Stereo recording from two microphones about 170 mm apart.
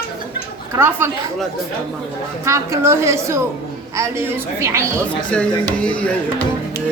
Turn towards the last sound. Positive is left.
turn(degrees=5)  # may be behind; listen again after turning